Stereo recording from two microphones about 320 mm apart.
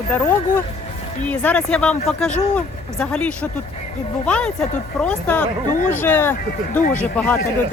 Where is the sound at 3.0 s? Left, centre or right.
Centre.